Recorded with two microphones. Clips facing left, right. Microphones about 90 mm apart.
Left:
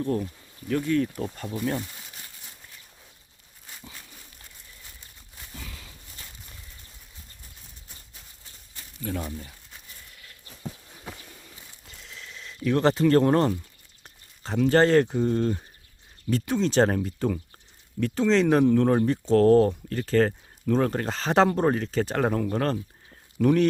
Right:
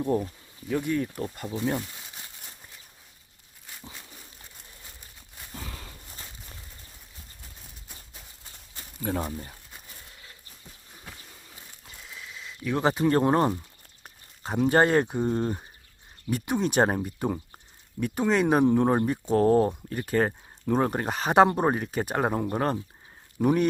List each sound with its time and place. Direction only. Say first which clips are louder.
0.0 s speech: right 1 dB; 15° right (ahead or behind)
1.5 s speech: even; 15° right (ahead or behind)
5.5 s walk: right 3 dB; 40° right (ahead or behind)
8.7 s a sound: right 2 dB; 35° right (ahead or behind)
11.9 s a sound: right 1 dB; 5° right (ahead or behind)
14.7 s speech: left 2 dB; 15° right (ahead or behind)